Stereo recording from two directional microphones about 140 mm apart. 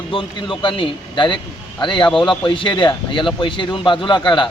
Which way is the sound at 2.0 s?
5° left (ahead or behind).